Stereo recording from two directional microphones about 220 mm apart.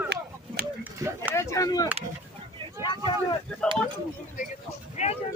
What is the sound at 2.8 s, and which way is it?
Vehicle, 20° left (ahead or behind).